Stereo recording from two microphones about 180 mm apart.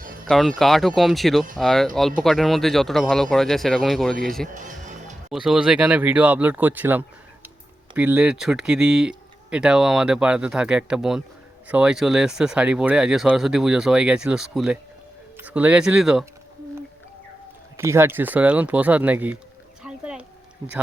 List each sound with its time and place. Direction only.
0.3 s speech: centre (ahead or behind)
4.5 s music: 45° right (ahead or behind)
5.3 s speech: 5° right (ahead or behind)
17.7 s speech: 15° right (ahead or behind)
19.8 s a sound: 5° right (ahead or behind)